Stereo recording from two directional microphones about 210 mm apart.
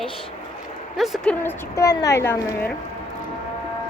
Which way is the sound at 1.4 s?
15° left (ahead or behind).